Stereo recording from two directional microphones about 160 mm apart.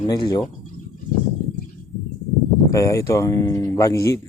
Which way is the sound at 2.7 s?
20° left (ahead or behind).